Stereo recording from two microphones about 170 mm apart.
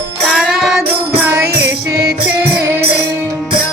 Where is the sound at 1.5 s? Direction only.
70° right (ahead or behind).